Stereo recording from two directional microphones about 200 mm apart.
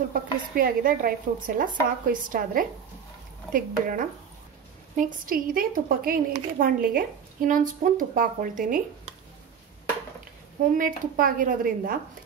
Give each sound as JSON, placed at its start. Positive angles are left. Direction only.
{"t": 0.1, "sound": "speech", "side_deg": -45}
{"t": 10.8, "sound": "speech", "side_deg": -45}